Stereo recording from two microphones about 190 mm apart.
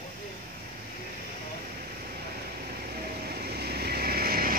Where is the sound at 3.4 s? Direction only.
55° right (ahead or behind).